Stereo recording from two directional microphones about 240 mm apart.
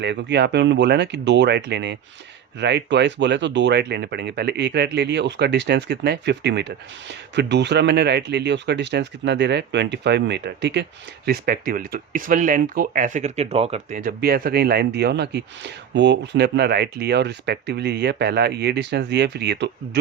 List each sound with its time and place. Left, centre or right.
0.0 s speech: right